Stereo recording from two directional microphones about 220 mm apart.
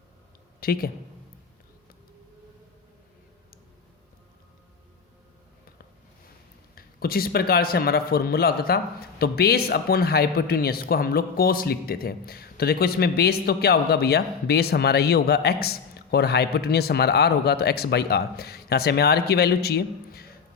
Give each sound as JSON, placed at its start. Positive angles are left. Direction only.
{"t": 0.6, "sound": "a man's voice", "side_deg": 40}
{"t": 6.7, "sound": "a man's voice", "side_deg": 45}